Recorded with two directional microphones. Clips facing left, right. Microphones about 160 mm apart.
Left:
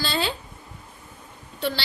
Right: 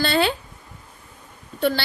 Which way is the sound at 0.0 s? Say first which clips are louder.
Right 6 dB; 60° right (ahead or behind).